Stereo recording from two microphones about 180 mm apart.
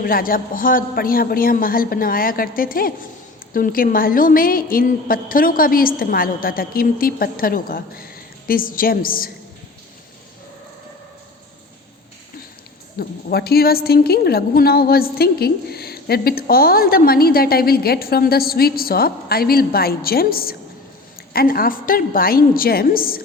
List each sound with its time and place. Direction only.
0.0 s a woman's voice: 55° left (ahead or behind)
13.0 s a woman's voice: 60° left (ahead or behind)